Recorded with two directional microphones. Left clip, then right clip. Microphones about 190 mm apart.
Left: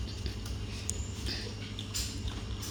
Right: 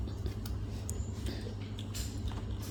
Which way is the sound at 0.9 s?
15° right (ahead or behind).